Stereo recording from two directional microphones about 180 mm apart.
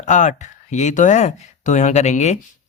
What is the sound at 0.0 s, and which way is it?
Speech, 40° left (ahead or behind).